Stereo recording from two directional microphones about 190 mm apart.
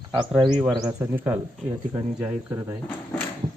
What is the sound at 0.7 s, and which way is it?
Speech, 15° right (ahead or behind).